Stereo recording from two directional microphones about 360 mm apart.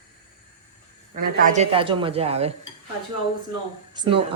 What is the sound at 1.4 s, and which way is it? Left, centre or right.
Speech, centre.